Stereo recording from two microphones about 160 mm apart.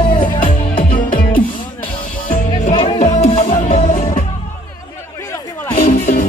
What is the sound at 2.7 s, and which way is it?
Music, 35° left (ahead or behind).